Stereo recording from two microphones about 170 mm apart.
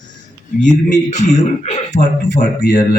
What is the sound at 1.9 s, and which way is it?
Speech, 80° left.